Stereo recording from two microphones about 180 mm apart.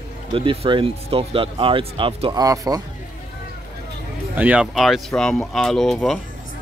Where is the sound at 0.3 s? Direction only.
30° right (ahead or behind).